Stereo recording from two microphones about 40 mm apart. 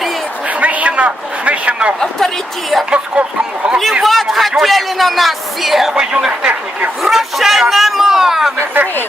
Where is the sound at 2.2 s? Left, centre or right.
Centre.